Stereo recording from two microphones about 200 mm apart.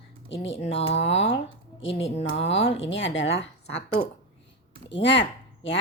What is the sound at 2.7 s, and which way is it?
Speech, 65° left (ahead or behind).